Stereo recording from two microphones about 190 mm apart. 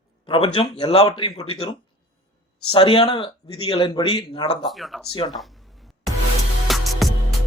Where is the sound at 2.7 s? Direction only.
30° left (ahead or behind).